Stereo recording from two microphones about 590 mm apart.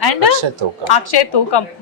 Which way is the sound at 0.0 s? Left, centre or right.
Left.